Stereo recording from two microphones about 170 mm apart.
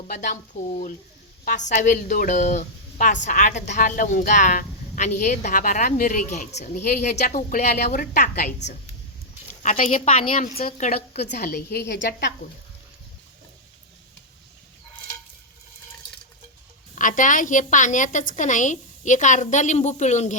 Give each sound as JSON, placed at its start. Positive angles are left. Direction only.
{"t": 0.1, "sound": "speech", "side_deg": 50}
{"t": 9.6, "sound": "speech", "side_deg": 40}
{"t": 10.3, "sound": "a woman's voice", "side_deg": 55}
{"t": 16.9, "sound": "speech", "side_deg": 50}